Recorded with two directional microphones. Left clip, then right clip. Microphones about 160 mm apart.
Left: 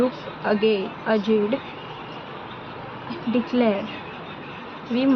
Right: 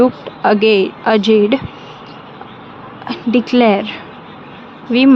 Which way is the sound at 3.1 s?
90° right.